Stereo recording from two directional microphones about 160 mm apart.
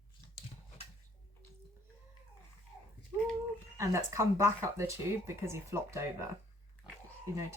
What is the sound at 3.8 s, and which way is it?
Speech, 20° right (ahead or behind).